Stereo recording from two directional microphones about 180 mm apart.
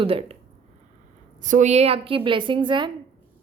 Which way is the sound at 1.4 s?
45° right (ahead or behind).